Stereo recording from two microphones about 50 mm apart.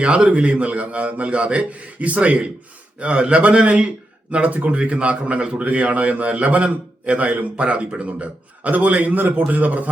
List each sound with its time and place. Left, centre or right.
0.0 s a man's voice: right